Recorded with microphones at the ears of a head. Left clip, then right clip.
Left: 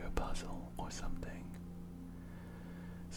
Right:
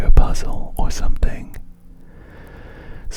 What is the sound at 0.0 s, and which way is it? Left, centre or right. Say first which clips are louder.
Whispering: right 16 dB; right.